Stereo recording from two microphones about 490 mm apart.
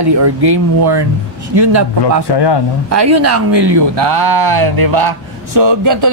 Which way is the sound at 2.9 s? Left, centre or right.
Right.